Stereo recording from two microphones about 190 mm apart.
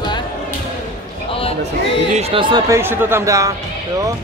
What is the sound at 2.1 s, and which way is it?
Speech, 30° right (ahead or behind).